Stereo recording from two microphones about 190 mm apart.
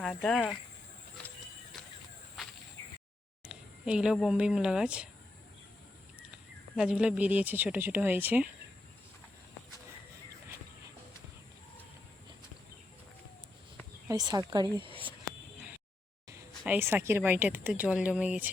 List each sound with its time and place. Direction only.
0.0 s speech: centre (ahead or behind)
2.4 s a sound: centre (ahead or behind)
3.4 s speech: 5° right (ahead or behind)
6.1 s speech: 5° right (ahead or behind)
14.1 s speech: 20° right (ahead or behind)
16.6 s speech: 10° right (ahead or behind)